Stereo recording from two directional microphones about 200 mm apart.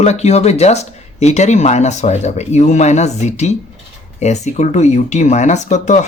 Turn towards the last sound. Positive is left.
turn(degrees=35)  # may be behind; listen again after turning